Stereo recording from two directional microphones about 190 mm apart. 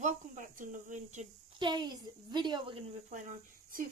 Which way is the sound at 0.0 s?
40° right (ahead or behind).